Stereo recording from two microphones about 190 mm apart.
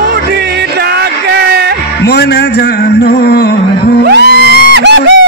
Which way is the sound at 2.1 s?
60° left (ahead or behind).